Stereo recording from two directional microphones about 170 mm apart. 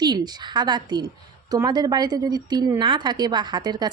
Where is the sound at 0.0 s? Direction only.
25° right (ahead or behind).